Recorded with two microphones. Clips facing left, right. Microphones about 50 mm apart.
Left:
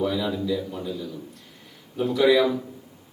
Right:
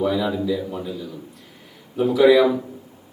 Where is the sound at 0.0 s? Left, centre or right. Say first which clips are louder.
Right 4 dB; centre.